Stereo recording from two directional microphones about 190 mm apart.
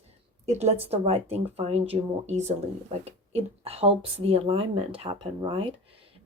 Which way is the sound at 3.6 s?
30° right (ahead or behind).